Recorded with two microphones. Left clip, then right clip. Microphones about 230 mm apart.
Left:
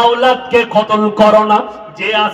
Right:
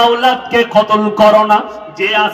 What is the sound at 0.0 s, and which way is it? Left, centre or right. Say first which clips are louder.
Music: even; left.